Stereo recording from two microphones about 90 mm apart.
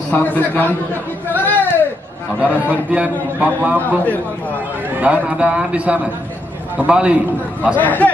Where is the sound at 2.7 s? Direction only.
15° right (ahead or behind).